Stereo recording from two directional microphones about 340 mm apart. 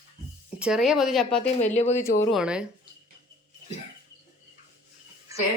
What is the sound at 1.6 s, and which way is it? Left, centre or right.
Speech, centre.